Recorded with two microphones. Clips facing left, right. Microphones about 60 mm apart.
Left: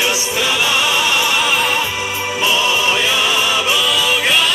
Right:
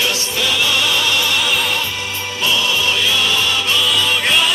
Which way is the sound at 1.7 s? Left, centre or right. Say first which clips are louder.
Left 3 dB; centre.